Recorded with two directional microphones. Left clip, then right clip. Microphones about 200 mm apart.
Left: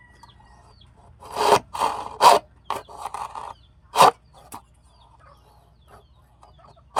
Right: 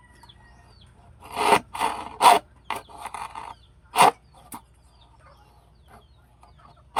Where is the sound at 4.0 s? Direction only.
35° left (ahead or behind).